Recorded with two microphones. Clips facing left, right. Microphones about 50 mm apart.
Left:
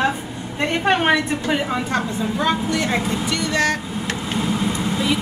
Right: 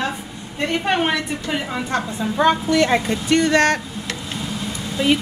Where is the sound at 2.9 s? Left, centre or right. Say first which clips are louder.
Right 3 dB; right.